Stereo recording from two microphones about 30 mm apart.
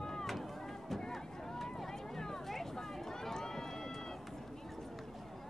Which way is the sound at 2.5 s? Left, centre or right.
Centre.